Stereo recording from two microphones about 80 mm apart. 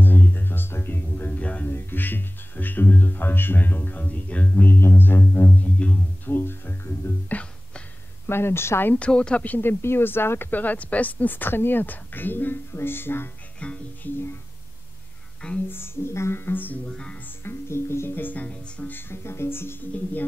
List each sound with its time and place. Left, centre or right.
0.0 s music: left
4.6 s music: left
7.2 s music: centre
8.3 s speech: left
9.0 s speech: centre
13.6 s music: centre
15.7 s music: left
16.8 s music: centre
17.4 s music: left